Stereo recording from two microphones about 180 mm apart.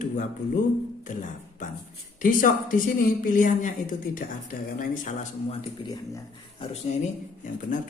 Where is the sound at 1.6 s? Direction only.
45° left (ahead or behind).